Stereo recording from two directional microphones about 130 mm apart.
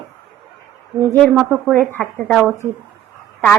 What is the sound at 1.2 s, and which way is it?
Speech, 5° right (ahead or behind).